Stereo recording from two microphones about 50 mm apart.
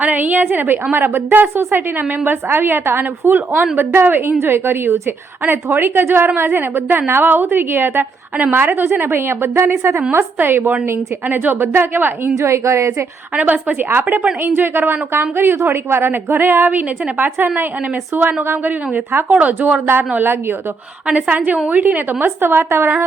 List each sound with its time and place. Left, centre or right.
0.0 s a woman's voice: right
2.2 s a woman's voice: right
4.4 s a woman's voice: right
9.0 s a woman's voice: right
12.4 s a woman's voice: right
13.3 s a woman's voice: right
20.1 s a woman's voice: right
21.1 s a woman's voice: right
22.2 s a woman's voice: right